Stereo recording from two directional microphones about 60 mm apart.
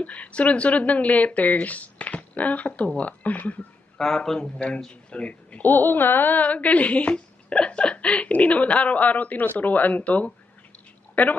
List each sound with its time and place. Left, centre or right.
0.0 s speech: left
4.0 s a man's voice: centre
4.4 s speech: centre
5.7 s speech: left